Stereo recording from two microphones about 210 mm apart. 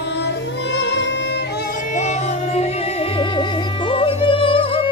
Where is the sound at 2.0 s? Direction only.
35° left (ahead or behind).